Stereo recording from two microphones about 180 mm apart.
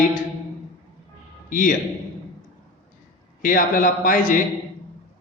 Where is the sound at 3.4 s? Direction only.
50° left (ahead or behind).